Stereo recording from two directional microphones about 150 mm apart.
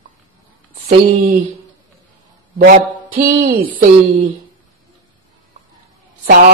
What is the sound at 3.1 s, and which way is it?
Music, 75° right (ahead or behind).